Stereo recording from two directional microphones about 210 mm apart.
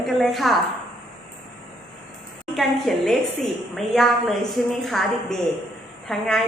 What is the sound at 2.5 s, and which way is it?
A woman's voice, centre (ahead or behind).